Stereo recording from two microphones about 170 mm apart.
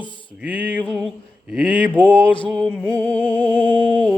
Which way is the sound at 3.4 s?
30° left (ahead or behind).